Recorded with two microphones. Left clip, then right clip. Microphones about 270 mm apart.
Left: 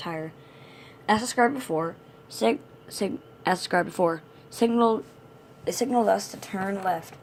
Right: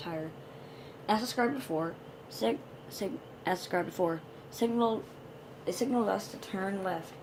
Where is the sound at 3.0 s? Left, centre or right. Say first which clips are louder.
Left 8 dB; left.